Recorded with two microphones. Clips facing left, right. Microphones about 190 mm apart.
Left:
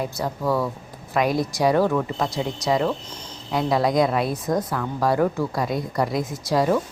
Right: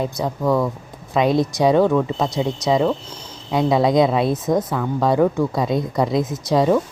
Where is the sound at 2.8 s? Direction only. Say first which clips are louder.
Right 4 dB; 10° right (ahead or behind).